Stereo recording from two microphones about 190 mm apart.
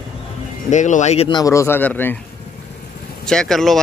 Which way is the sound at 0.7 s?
40° left (ahead or behind).